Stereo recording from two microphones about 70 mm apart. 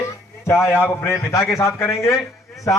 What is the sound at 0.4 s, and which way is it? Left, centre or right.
A man's voice, left.